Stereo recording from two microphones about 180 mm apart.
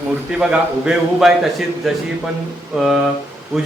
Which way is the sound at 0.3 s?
5° right (ahead or behind).